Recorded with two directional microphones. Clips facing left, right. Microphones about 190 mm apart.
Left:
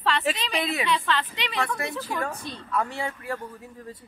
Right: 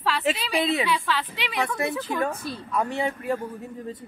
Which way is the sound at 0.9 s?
10° right (ahead or behind).